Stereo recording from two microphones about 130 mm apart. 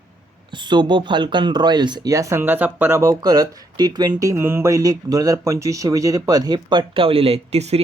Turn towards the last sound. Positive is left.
turn(degrees=-50)  # may be behind; listen again after turning